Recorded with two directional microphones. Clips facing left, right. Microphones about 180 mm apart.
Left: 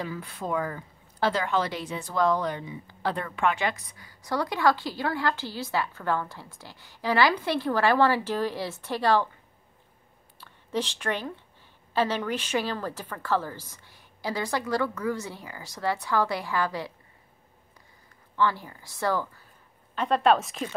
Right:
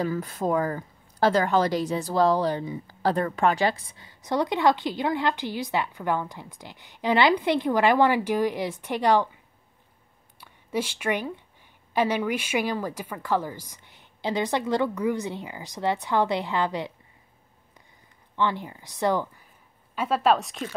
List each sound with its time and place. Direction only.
0.0 s a woman's voice: 45° right (ahead or behind); by 9.3 s 15° right (ahead or behind)
10.3 s a woman's voice: 10° right (ahead or behind)
18.3 s a woman's voice: 20° right (ahead or behind)
20.0 s a woman's voice: centre (ahead or behind)